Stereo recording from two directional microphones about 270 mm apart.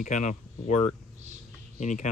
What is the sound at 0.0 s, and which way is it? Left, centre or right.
Speech, left.